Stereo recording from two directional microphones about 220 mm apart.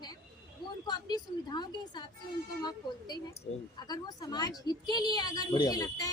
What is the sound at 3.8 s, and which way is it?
A woman's voice, 20° left (ahead or behind).